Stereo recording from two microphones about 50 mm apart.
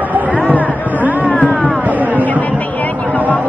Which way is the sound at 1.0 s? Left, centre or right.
Right.